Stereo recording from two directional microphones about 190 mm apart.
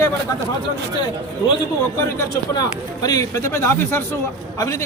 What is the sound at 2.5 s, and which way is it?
A man's voice, 20° left (ahead or behind).